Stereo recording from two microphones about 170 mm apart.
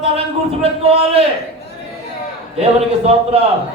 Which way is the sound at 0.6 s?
35° right (ahead or behind).